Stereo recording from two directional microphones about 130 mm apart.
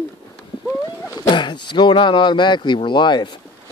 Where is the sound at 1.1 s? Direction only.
35° left (ahead or behind).